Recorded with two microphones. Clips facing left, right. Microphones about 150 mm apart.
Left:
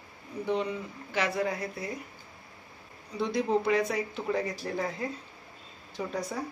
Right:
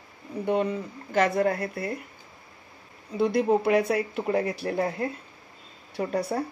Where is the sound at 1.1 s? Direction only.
50° right (ahead or behind).